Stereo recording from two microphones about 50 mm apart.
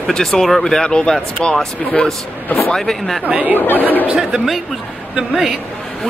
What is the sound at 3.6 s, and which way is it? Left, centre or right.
Speech, left.